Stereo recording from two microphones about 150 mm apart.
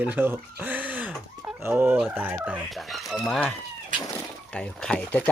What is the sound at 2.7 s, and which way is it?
Speech, centre (ahead or behind).